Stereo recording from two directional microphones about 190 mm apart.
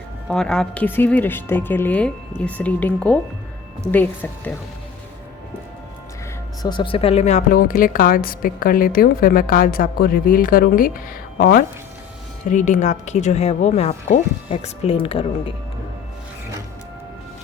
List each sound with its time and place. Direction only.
0.3 s a woman's voice: 5° left (ahead or behind)
6.6 s a woman's voice: 25° left (ahead or behind); by 11.6 s 50° left (ahead or behind)
12.5 s a woman's voice: 40° left (ahead or behind)